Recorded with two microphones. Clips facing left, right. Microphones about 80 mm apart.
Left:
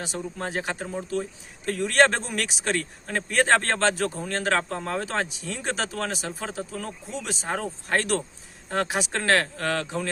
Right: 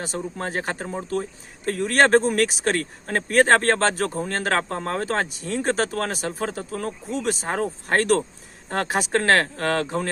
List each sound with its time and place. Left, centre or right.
0.3 s speech: right